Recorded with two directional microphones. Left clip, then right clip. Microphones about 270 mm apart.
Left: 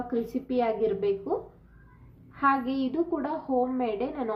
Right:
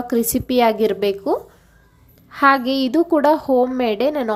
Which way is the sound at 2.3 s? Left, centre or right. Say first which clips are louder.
Right 10 dB; right.